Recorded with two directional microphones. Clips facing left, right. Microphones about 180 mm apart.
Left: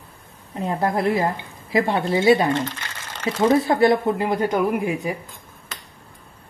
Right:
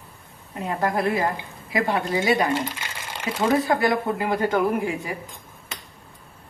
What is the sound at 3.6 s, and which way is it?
A woman's voice, 25° left (ahead or behind).